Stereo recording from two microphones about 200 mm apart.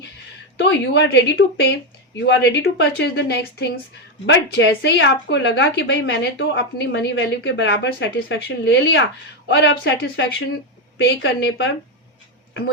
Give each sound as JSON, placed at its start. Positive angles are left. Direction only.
{"t": 0.6, "sound": "a woman's voice", "side_deg": 60}